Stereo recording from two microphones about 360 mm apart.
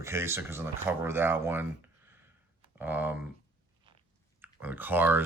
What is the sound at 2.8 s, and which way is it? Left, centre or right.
Speech, centre.